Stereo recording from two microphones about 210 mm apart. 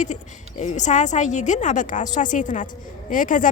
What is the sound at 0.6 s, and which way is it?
Speech, 35° left (ahead or behind).